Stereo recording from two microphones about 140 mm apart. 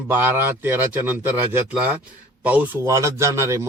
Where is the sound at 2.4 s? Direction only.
10° right (ahead or behind).